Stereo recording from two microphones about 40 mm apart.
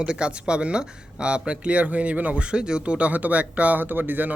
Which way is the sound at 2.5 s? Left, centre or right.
Right.